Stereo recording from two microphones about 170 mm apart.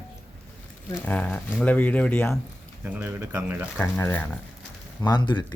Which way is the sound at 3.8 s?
10° left (ahead or behind).